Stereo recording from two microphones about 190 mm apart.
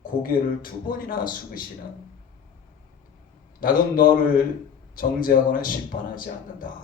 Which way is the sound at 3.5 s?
45° left (ahead or behind).